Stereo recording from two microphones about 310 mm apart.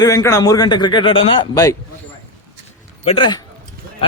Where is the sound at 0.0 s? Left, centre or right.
Centre.